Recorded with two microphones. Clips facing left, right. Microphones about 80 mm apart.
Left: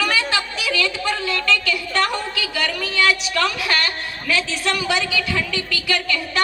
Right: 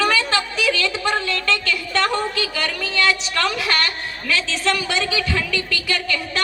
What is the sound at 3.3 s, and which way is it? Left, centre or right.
Speech, right.